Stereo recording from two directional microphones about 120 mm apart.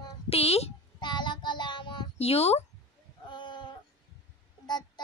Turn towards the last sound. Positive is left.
turn(degrees=35)  # may be behind; listen again after turning